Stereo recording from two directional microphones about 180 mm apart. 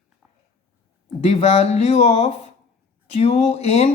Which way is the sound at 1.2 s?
35° left (ahead or behind).